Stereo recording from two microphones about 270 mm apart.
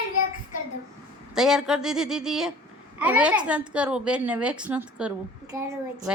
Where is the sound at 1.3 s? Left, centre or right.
Centre.